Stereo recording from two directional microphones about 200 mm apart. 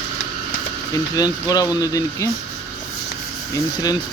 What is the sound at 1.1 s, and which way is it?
Speech, 20° left (ahead or behind).